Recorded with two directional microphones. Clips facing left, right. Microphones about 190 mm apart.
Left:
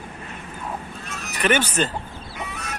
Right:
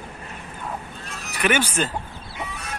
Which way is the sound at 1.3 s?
10° right (ahead or behind).